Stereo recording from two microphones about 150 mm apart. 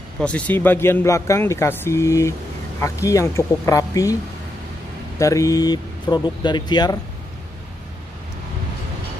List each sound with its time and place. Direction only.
0.2 s speech: 10° left (ahead or behind)
5.2 s speech: 20° left (ahead or behind)